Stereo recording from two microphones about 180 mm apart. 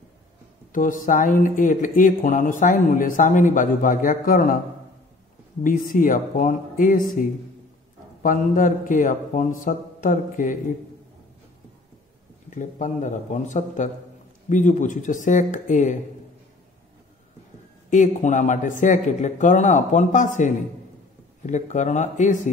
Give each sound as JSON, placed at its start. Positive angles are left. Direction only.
{"t": 0.7, "sound": "speech", "side_deg": 45}
{"t": 5.6, "sound": "speech", "side_deg": 50}
{"t": 12.4, "sound": "speech", "side_deg": 45}
{"t": 17.8, "sound": "a man's voice", "side_deg": 45}